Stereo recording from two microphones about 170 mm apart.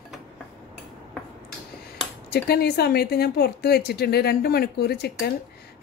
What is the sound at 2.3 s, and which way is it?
A woman's voice, 70° left (ahead or behind).